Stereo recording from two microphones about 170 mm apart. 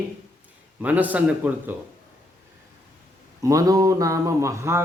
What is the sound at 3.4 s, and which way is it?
A man's voice, 20° right (ahead or behind).